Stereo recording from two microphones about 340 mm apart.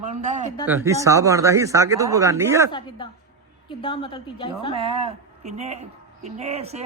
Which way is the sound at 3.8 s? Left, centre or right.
Centre.